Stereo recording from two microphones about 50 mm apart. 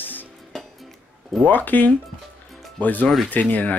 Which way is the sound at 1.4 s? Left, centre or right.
Left.